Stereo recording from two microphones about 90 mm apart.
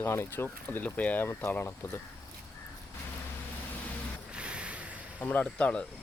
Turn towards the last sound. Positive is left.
turn(degrees=15)  # may be behind; listen again after turning